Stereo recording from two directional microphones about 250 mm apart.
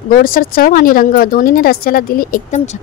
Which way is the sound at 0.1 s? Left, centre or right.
Left.